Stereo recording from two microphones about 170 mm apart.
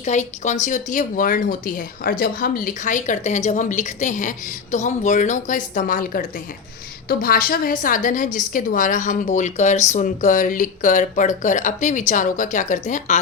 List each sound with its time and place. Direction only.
0.0 s speech: 45° left (ahead or behind)